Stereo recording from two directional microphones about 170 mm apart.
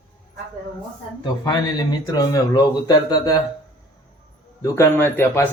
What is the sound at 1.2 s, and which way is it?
Speech, 25° left (ahead or behind).